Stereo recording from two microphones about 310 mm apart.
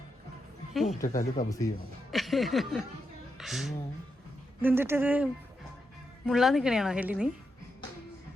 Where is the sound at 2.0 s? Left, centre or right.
Centre.